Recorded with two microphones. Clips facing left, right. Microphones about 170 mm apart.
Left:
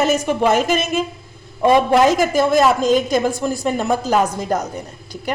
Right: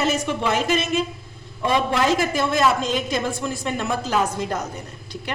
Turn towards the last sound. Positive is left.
turn(degrees=40)  # may be behind; listen again after turning